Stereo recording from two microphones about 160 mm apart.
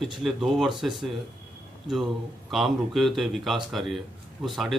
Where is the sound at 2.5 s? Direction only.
Centre (ahead or behind).